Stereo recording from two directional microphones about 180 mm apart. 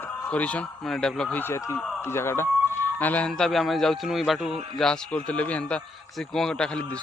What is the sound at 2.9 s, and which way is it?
A man's voice, 10° left (ahead or behind).